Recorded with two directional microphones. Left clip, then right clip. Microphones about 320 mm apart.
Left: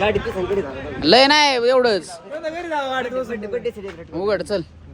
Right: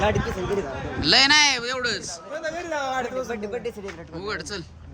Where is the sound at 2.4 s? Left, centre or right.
Left.